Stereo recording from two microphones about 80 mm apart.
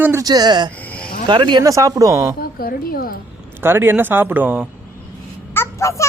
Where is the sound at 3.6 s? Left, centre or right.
Right.